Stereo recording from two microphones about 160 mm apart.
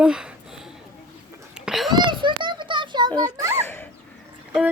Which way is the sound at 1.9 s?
30° right (ahead or behind).